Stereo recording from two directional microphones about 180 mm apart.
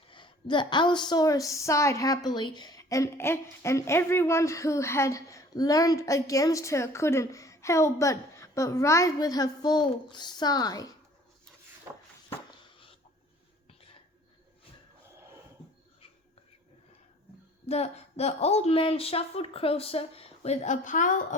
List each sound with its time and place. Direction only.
0.1 s a woman's voice: 25° left (ahead or behind)
17.7 s a woman's voice: 35° left (ahead or behind)